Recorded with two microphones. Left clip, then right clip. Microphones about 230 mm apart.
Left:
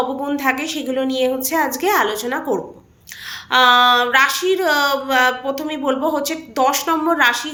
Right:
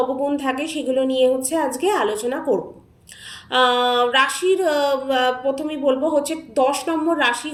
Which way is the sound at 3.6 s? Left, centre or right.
Centre.